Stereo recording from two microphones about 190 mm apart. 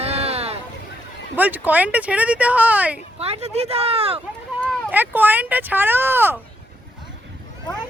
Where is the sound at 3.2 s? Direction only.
35° right (ahead or behind).